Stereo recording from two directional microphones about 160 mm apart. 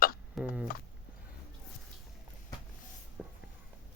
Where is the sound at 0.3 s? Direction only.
5° right (ahead or behind).